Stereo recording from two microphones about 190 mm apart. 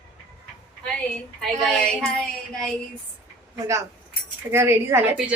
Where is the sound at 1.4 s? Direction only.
5° left (ahead or behind).